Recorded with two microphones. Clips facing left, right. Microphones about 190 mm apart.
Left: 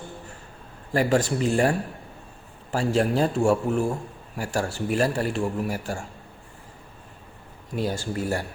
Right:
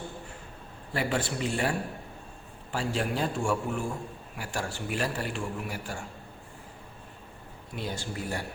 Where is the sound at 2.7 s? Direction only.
40° left (ahead or behind).